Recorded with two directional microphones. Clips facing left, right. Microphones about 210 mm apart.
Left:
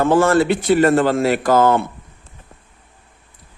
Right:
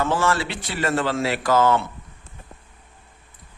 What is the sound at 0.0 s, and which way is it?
A man's voice, 55° left (ahead or behind).